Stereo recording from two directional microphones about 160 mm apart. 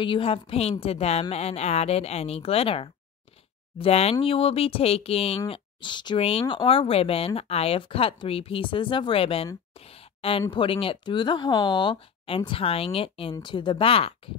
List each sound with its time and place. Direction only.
0.0 s speech: 35° left (ahead or behind)
9.8 s a sound: 35° left (ahead or behind)
10.5 s speech: 30° left (ahead or behind)